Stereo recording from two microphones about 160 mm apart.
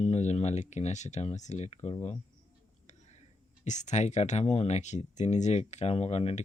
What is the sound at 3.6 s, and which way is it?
Speech, 50° left (ahead or behind).